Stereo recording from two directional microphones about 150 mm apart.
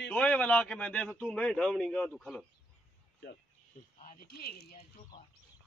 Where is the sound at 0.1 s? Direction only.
10° left (ahead or behind).